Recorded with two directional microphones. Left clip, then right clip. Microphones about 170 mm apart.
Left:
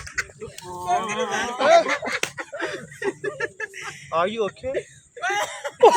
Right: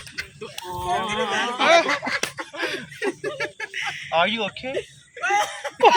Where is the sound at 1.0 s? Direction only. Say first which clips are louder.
Right 1 dB; 45° right (ahead or behind).